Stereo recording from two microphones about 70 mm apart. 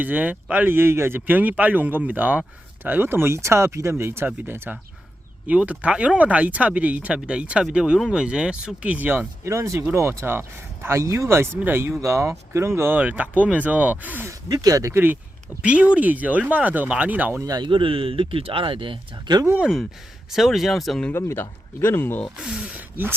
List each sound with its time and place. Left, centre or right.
0.0 s speech: right
5.5 s speech: centre
9.4 s speech: right
11.5 s speech: right
12.0 s speech: right
13.0 s speech: right
14.5 s speech: right
14.9 s speech: right
15.6 s speech: centre
17.4 s speech: right
19.1 s speech: right
20.3 s speech: centre
21.1 s speech: left
22.4 s speech: centre